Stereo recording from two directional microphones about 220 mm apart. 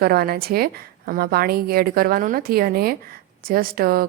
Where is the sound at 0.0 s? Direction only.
45° right (ahead or behind).